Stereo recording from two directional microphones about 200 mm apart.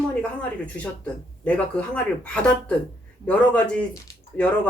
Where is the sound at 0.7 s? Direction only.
5° left (ahead or behind).